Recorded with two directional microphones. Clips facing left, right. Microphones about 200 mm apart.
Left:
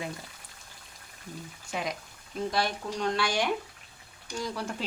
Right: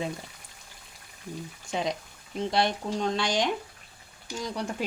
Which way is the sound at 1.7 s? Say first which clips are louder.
Right 4 dB; 25° right (ahead or behind).